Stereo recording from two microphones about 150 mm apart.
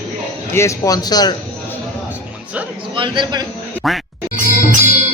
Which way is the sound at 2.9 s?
30° right (ahead or behind).